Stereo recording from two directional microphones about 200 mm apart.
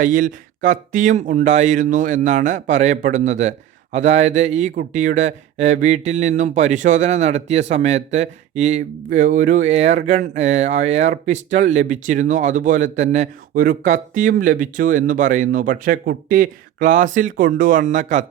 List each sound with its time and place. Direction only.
0.0 s speech: 40° right (ahead or behind)